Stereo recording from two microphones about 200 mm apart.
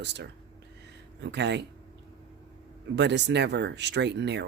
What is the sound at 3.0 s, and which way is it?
Speech, 60° right (ahead or behind).